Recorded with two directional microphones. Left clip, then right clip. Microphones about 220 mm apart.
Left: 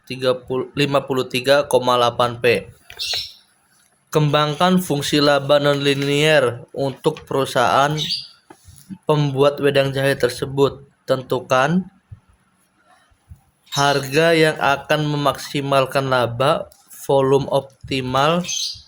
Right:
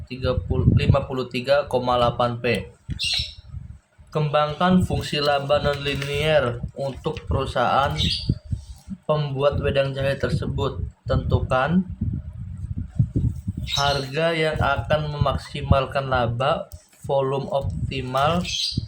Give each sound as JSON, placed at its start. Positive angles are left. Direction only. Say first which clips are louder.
{"t": 0.1, "sound": "speech", "louder": "left 6 dB", "side_deg": 50}
{"t": 4.1, "sound": "speech", "louder": "left 4 dB", "side_deg": 50}
{"t": 9.0, "sound": "speech", "louder": "left 5 dB", "side_deg": 45}
{"t": 13.7, "sound": "speech", "louder": "left 6 dB", "side_deg": 50}